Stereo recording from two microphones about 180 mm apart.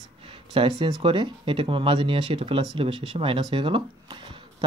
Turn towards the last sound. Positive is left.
turn(degrees=-30)  # may be behind; listen again after turning